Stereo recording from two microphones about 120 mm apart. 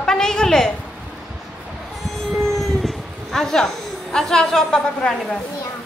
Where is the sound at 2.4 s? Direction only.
Centre (ahead or behind).